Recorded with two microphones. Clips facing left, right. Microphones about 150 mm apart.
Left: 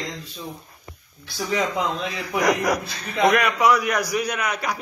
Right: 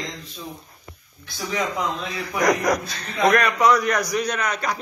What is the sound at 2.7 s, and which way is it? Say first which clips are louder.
A man's voice: right 1 dB; 5° left (ahead or behind).